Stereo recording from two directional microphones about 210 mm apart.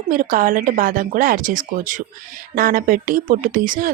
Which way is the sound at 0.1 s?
40° right (ahead or behind).